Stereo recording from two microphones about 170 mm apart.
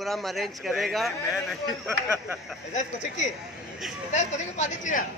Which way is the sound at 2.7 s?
45° left (ahead or behind).